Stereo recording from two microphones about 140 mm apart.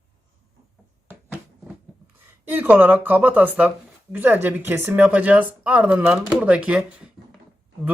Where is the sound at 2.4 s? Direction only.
15° right (ahead or behind).